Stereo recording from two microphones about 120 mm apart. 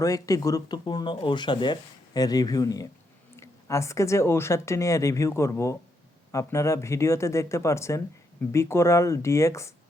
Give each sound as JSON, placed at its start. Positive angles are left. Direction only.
{"t": 0.0, "sound": "a woman's voice", "side_deg": 30}